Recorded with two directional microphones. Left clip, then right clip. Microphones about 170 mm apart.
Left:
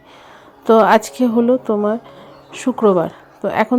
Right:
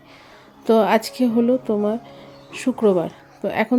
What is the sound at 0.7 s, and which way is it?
A woman's voice, 10° left (ahead or behind).